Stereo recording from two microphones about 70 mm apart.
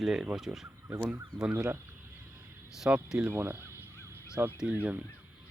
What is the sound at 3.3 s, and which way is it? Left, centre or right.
Fowl, right.